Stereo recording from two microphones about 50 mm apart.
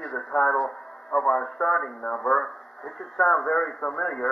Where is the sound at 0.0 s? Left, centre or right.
Centre.